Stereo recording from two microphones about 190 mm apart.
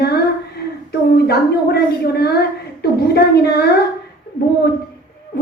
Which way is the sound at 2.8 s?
55° left (ahead or behind).